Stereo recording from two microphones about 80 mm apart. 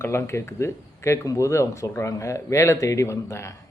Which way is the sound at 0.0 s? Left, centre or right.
Left.